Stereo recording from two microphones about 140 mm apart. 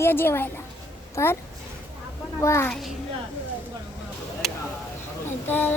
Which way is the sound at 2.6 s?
5° left (ahead or behind).